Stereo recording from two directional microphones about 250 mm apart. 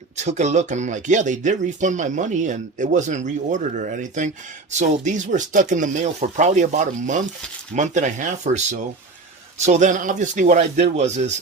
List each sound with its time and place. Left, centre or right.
0.2 s speech: right